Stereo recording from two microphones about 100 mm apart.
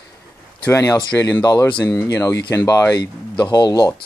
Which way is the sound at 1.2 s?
40° left (ahead or behind).